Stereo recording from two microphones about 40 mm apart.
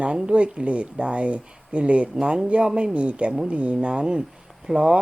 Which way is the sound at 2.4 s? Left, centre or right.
Right.